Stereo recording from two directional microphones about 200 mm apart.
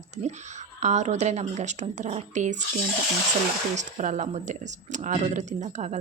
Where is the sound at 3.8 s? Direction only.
35° right (ahead or behind).